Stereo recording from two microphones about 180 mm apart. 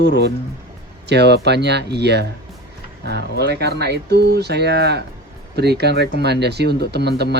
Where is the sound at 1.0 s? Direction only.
70° right (ahead or behind).